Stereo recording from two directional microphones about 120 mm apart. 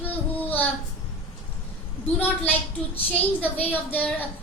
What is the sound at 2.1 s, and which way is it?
A woman's voice, 15° left (ahead or behind).